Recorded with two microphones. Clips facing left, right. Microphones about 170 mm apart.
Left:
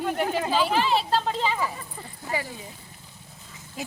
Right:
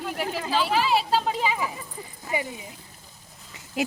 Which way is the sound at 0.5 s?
Centre (ahead or behind).